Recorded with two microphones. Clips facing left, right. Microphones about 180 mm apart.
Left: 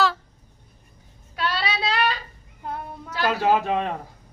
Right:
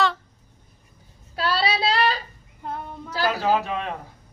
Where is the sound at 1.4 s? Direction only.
35° right (ahead or behind).